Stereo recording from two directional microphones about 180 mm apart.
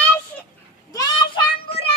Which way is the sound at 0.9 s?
25° left (ahead or behind).